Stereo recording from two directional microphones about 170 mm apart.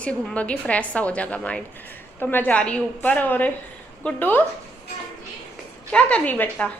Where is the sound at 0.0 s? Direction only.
5° left (ahead or behind).